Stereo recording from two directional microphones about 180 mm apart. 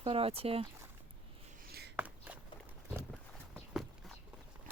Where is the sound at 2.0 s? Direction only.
10° right (ahead or behind).